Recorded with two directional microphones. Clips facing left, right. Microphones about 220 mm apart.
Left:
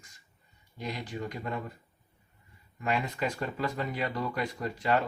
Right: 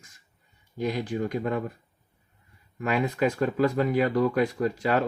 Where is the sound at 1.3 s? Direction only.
55° right (ahead or behind).